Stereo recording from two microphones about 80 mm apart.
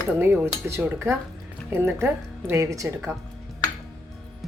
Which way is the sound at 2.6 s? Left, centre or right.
Right.